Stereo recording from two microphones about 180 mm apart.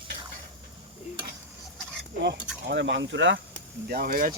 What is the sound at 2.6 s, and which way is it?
Speech, 75° right (ahead or behind).